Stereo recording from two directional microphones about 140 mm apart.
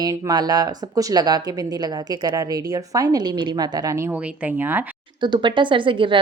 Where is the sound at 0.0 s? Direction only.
25° right (ahead or behind).